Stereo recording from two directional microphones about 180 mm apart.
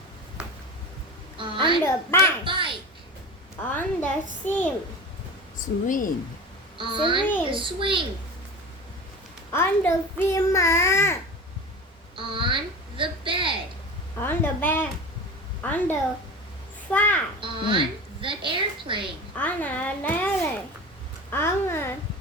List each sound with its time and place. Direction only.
1.4 s a sound: 25° right (ahead or behind)
1.8 s a child's voice: 15° left (ahead or behind)
2.4 s a woman's voice: 30° right (ahead or behind)
3.8 s a child's voice: 10° left (ahead or behind)
5.5 s speech: 50° left (ahead or behind)
6.7 s a woman's voice: 30° right (ahead or behind)
9.5 s a child's voice: 15° left (ahead or behind)
12.1 s a sound: 30° right (ahead or behind)
14.2 s a child's voice: 10° left (ahead or behind)
17.4 s a woman's voice: 30° right (ahead or behind)
19.4 s a child's voice: 10° left (ahead or behind)
21.2 s a child's voice: 15° left (ahead or behind)